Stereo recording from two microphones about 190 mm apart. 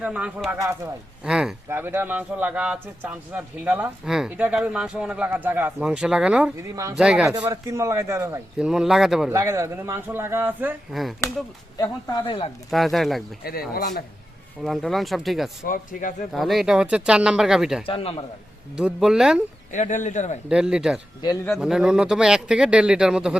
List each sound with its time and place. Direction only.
0.0 s a man's voice: 5° right (ahead or behind)
7.4 s speech: 15° right (ahead or behind)
8.5 s a man's voice: 5° right (ahead or behind)
9.3 s speech: 15° right (ahead or behind)
11.8 s speech: 25° left (ahead or behind)
12.7 s a man's voice: centre (ahead or behind)
13.4 s speech: 50° left (ahead or behind)
14.6 s a man's voice: centre (ahead or behind)
15.6 s speech: 45° left (ahead or behind)
16.3 s a man's voice: centre (ahead or behind)
17.8 s speech: 30° left (ahead or behind)
18.8 s a man's voice: 5° right (ahead or behind)
19.7 s speech: 40° left (ahead or behind)
20.5 s a man's voice: 5° right (ahead or behind)